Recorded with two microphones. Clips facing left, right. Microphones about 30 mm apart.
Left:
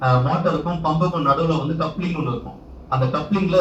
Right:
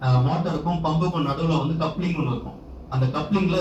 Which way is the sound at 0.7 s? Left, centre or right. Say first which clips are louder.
Left 3 dB; centre.